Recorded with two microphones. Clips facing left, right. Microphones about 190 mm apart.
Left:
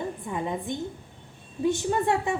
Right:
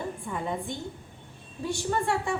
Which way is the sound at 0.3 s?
20° left (ahead or behind).